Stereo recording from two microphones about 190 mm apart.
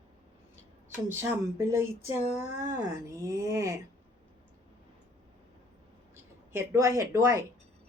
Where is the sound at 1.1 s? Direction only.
10° right (ahead or behind).